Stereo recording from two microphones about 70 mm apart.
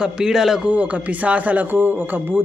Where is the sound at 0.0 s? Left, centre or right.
Centre.